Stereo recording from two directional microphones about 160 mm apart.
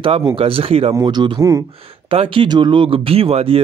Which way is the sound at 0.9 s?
25° right (ahead or behind).